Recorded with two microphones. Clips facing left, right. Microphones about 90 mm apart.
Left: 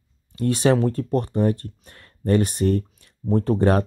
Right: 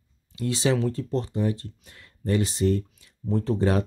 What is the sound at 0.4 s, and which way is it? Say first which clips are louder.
Speech: left 5 dB; 50° left (ahead or behind).